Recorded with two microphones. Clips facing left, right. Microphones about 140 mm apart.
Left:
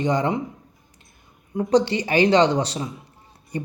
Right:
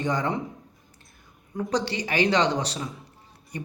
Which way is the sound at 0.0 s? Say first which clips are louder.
Left 5 dB; 20° left (ahead or behind).